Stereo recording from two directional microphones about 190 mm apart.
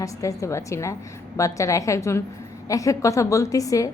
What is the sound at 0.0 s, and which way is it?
A woman's voice, 15° left (ahead or behind).